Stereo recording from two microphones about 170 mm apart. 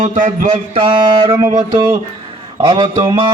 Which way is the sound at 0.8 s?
25° right (ahead or behind).